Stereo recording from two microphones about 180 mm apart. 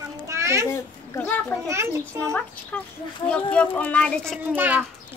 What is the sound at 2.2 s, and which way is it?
Speech, 5° left (ahead or behind).